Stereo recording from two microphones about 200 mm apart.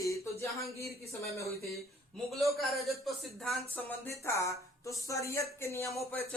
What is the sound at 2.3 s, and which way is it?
Speech, centre (ahead or behind).